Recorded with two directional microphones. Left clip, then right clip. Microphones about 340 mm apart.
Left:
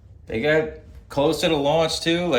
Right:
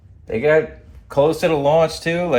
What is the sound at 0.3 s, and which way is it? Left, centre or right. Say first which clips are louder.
Speech: right 5 dB; centre.